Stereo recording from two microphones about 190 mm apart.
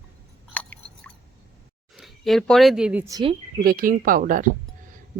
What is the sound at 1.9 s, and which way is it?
Speech, centre (ahead or behind).